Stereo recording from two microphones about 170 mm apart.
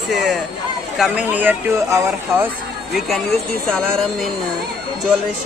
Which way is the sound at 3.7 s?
5° left (ahead or behind).